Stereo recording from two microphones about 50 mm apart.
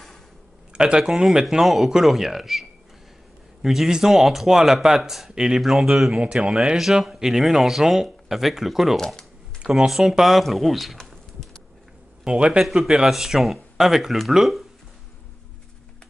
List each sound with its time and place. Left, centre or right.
0.7 s speech: centre
3.6 s speech: centre
6.5 s speech: centre
6.8 s speech: centre
9.6 s a sound: centre
9.8 s speech: centre
11.0 s pigeon: centre
12.3 s speech: centre
12.6 s speech: centre